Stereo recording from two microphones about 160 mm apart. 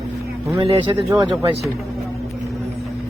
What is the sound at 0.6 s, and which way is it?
Speech, 35° right (ahead or behind).